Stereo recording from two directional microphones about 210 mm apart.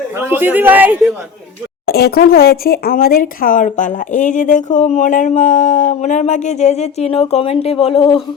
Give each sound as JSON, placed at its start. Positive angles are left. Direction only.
{"t": 0.1, "sound": "speech", "side_deg": -10}
{"t": 1.9, "sound": "speech", "side_deg": 50}